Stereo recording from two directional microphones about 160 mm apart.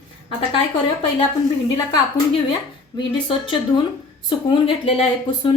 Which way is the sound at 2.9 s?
30° left (ahead or behind).